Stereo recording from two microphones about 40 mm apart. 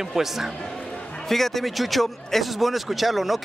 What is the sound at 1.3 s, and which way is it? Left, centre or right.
Speech, centre.